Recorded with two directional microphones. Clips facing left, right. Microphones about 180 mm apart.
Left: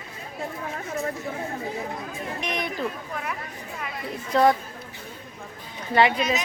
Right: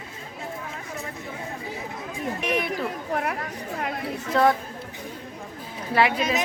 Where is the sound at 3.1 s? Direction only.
60° right (ahead or behind).